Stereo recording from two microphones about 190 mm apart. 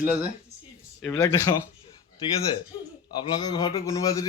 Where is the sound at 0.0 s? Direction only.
10° right (ahead or behind).